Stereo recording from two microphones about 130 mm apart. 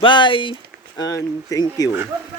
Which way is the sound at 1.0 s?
25° left (ahead or behind).